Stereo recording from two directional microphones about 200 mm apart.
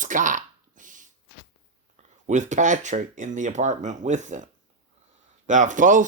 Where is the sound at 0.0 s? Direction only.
40° right (ahead or behind).